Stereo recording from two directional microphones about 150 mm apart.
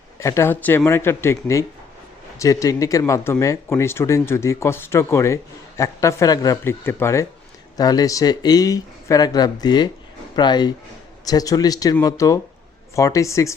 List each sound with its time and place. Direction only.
0.2 s speech: 20° left (ahead or behind)